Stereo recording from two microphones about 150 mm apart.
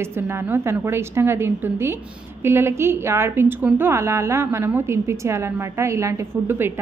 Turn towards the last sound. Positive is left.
turn(degrees=-15)  # may be behind; listen again after turning